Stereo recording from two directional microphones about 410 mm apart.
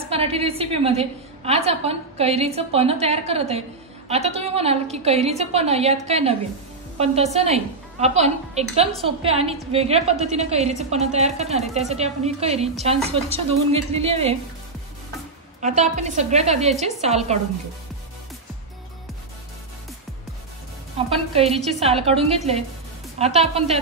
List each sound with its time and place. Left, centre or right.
0.1 s a woman's voice: centre
15.6 s a woman's voice: centre
21.3 s a woman's voice: centre